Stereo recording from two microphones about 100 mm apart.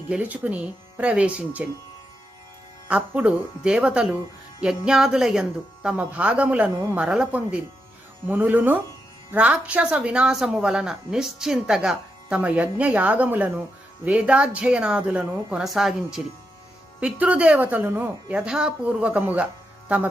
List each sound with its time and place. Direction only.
0.1 s speech: 15° right (ahead or behind)
2.9 s speech: 15° right (ahead or behind)